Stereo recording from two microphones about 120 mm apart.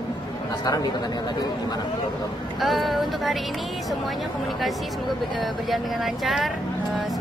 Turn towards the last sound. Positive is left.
turn(degrees=0)  # may be behind; listen again after turning